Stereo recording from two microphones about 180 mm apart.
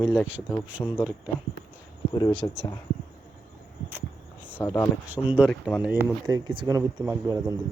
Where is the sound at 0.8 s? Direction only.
15° left (ahead or behind).